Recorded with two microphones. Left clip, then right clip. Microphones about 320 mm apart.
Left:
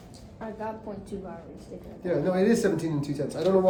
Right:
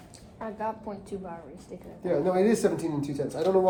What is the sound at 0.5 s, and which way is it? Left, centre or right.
Speech, right.